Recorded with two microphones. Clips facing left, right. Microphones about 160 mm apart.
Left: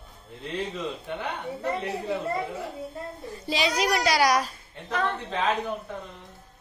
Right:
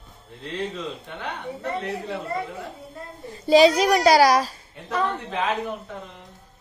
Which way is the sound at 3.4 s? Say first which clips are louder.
Right 10 dB; 40° right (ahead or behind).